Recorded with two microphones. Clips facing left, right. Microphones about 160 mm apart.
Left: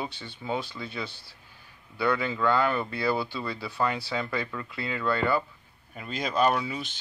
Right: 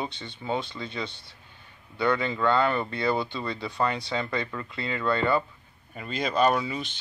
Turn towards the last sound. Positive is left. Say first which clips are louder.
# right 1 dB
turn(degrees=5)  # may be behind; listen again after turning